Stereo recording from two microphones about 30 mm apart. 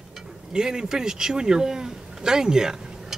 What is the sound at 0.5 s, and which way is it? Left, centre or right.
Speech, right.